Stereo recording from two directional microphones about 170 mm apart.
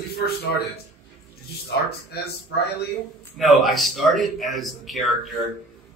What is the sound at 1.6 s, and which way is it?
Speech, 70° left (ahead or behind).